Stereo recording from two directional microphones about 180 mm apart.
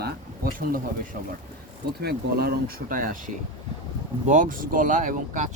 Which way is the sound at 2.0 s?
60° right (ahead or behind).